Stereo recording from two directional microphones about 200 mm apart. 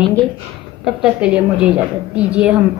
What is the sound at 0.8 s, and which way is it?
A woman's voice, 5° right (ahead or behind).